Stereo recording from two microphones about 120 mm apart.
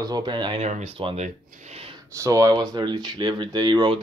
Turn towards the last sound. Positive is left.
turn(degrees=-40)  # may be behind; listen again after turning